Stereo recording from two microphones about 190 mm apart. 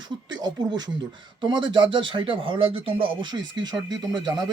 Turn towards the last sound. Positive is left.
turn(degrees=-20)  # may be behind; listen again after turning